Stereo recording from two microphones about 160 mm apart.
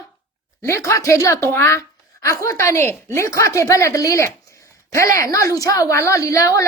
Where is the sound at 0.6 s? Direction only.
15° left (ahead or behind).